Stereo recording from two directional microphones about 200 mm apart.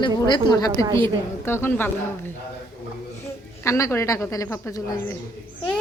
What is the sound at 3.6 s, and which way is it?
A woman's voice, 15° left (ahead or behind).